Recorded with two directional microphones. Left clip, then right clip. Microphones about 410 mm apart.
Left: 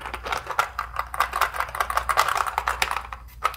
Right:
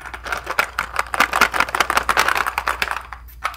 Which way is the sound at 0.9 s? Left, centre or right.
Right.